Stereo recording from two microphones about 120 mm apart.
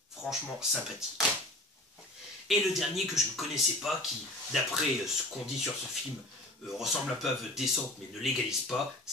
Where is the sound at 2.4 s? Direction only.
Centre (ahead or behind).